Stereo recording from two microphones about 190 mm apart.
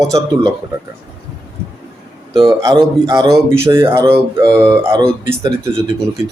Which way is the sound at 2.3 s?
20° right (ahead or behind).